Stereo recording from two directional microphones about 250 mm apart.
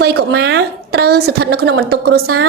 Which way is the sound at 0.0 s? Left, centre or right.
Right.